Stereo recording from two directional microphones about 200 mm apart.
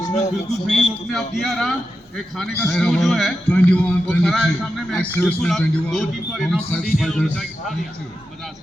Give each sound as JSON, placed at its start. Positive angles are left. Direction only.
{"t": 0.4, "sound": "a man's voice", "side_deg": 35}
{"t": 0.9, "sound": "a man's voice", "side_deg": 0}